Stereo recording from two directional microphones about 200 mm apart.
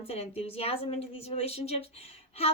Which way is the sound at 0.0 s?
30° left (ahead or behind).